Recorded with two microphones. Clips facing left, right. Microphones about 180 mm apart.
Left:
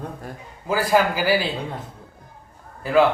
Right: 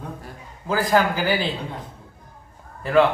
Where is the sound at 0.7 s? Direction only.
5° left (ahead or behind).